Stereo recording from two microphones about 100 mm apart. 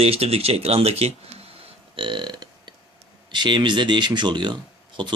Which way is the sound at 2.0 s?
55° right (ahead or behind).